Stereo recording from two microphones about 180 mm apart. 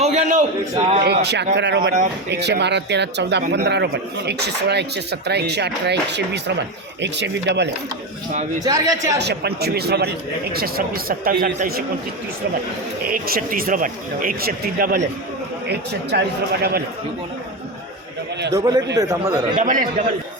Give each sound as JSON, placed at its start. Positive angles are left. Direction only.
{"t": 0.0, "sound": "a sound", "side_deg": -40}
{"t": 1.0, "sound": "speech", "side_deg": -65}
{"t": 8.3, "sound": "a man's voice", "side_deg": -40}
{"t": 8.6, "sound": "a man's voice", "side_deg": -20}
{"t": 9.1, "sound": "speech", "side_deg": -65}
{"t": 13.1, "sound": "speech", "side_deg": -55}
{"t": 15.6, "sound": "speech", "side_deg": -65}
{"t": 18.5, "sound": "a man's voice", "side_deg": -20}
{"t": 19.5, "sound": "speech", "side_deg": -45}